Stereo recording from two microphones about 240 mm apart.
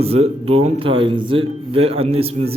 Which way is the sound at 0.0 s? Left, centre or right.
Right.